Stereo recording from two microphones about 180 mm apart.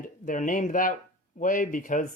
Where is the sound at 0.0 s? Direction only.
45° left (ahead or behind).